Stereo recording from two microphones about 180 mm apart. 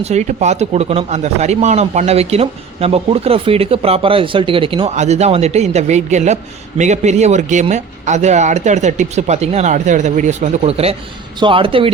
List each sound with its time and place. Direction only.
0.0 s speech: 40° right (ahead or behind)